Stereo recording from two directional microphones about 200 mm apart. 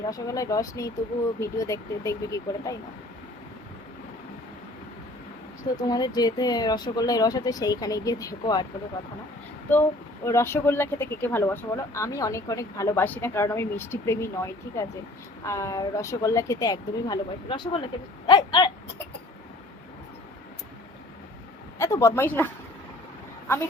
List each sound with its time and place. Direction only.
0.1 s speech: 15° left (ahead or behind)
5.7 s speech: 20° left (ahead or behind)
10.2 s speech: 15° left (ahead or behind)
21.8 s speech: 15° left (ahead or behind)